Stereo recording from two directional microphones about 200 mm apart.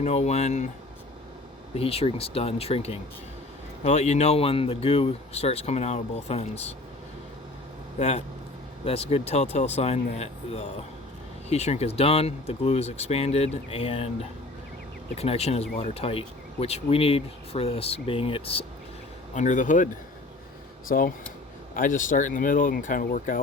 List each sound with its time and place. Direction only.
0.0 s speech: 35° left (ahead or behind)
1.7 s speech: 30° left (ahead or behind)
7.9 s speech: 35° left (ahead or behind)
15.1 s speech: 30° left (ahead or behind)
19.3 s speech: 40° left (ahead or behind)